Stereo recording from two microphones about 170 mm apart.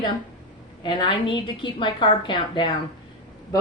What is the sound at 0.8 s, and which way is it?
A woman's voice, 25° left (ahead or behind).